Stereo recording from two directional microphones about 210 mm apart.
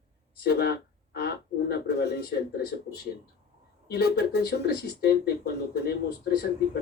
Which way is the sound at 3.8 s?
50° left (ahead or behind).